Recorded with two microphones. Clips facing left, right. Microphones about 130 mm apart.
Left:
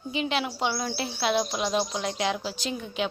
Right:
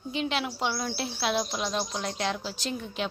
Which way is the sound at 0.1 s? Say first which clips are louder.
Left 2 dB; centre (ahead or behind).